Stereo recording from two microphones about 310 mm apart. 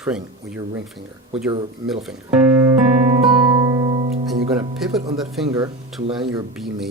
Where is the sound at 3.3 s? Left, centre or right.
Centre.